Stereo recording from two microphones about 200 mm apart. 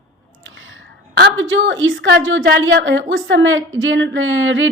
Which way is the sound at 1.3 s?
70° right (ahead or behind).